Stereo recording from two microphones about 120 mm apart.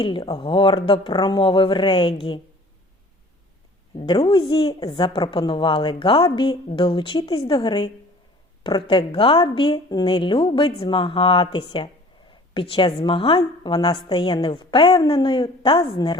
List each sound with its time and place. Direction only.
0.0 s a woman's voice: 45° left (ahead or behind)
3.9 s a woman's voice: 50° left (ahead or behind)
12.3 s a sound: 45° left (ahead or behind)
13.0 s a woman's voice: 45° left (ahead or behind)